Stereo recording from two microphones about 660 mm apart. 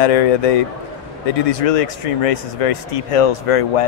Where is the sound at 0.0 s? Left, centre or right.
Left.